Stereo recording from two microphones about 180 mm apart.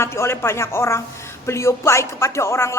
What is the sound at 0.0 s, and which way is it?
Speech, 15° left (ahead or behind).